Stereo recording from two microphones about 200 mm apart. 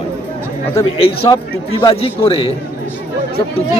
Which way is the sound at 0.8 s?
30° left (ahead or behind).